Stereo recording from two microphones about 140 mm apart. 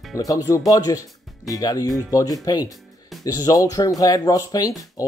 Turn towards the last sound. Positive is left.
turn(degrees=25)  # may be behind; listen again after turning